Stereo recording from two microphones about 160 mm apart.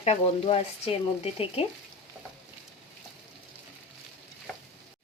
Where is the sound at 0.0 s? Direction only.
40° left (ahead or behind).